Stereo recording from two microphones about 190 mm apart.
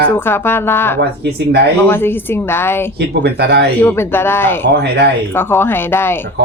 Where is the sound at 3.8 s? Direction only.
10° left (ahead or behind).